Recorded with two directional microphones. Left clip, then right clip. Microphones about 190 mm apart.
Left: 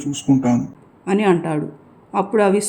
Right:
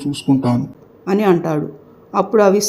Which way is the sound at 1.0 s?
5° left (ahead or behind).